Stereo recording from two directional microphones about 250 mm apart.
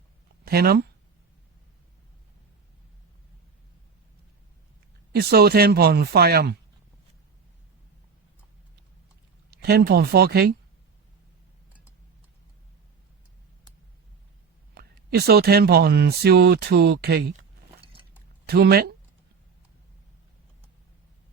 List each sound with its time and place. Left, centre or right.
0.4 s speech: right
5.1 s speech: right
9.5 s speech: right
14.8 s speech: right
18.4 s speech: right